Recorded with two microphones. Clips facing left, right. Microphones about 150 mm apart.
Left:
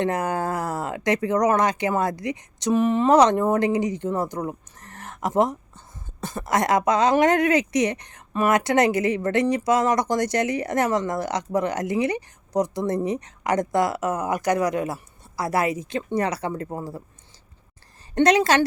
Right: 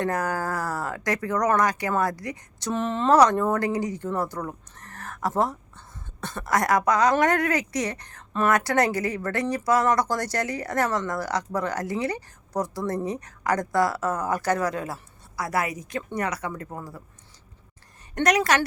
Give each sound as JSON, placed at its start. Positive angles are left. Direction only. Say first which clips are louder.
{"t": 0.0, "sound": "speech", "louder": "left 2 dB", "side_deg": 20}
{"t": 18.1, "sound": "speech", "louder": "left 4 dB", "side_deg": 25}